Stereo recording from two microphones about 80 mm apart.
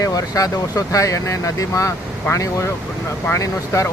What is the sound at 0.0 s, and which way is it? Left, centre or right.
Speech, left.